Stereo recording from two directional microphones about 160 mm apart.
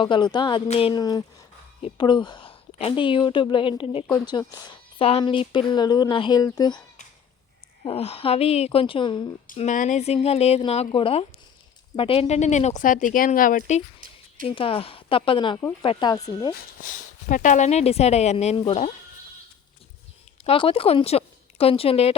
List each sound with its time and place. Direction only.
0.0 s a woman's voice: 30° left (ahead or behind)
4.9 s speech: 35° left (ahead or behind)
7.9 s a woman's voice: 40° left (ahead or behind)
9.6 s a woman's voice: 50° left (ahead or behind)
14.4 s a woman's voice: 35° left (ahead or behind)
16.9 s speech: 55° left (ahead or behind)
20.4 s speech: 35° left (ahead or behind)